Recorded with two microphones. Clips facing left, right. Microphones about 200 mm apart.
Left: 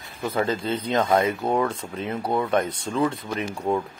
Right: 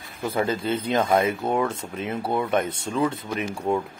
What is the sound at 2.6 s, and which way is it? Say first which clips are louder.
Speech: even; 25° right (ahead or behind).